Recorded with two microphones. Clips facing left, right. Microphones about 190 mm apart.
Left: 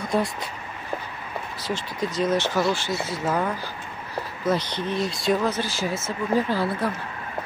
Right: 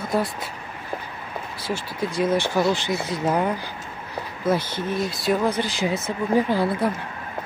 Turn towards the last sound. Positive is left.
turn(degrees=-15)  # may be behind; listen again after turning